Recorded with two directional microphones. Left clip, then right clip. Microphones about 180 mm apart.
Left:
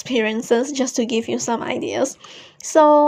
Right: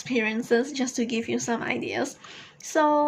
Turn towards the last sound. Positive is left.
turn(degrees=40)  # may be behind; listen again after turning